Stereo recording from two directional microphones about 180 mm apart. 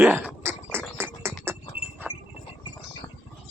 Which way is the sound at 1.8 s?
30° left (ahead or behind).